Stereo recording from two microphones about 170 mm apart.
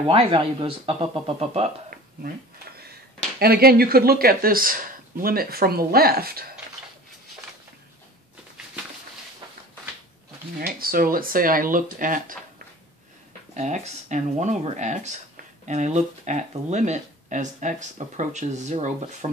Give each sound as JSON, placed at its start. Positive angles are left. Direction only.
{"t": 0.1, "sound": "speech", "side_deg": -35}
{"t": 3.3, "sound": "speech", "side_deg": -65}
{"t": 10.8, "sound": "speech", "side_deg": -60}
{"t": 13.6, "sound": "speech", "side_deg": -45}